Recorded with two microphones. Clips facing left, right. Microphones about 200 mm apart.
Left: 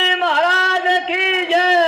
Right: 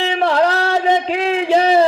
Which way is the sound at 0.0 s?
45° right (ahead or behind).